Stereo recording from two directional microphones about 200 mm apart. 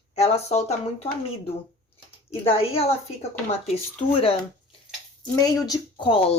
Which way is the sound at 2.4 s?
30° left (ahead or behind).